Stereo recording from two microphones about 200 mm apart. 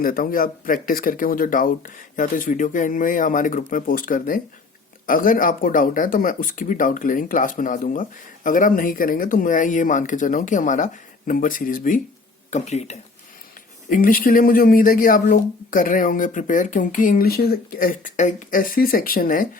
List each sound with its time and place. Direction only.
0.0 s speech: 45° left (ahead or behind)
13.9 s speech: 45° left (ahead or behind)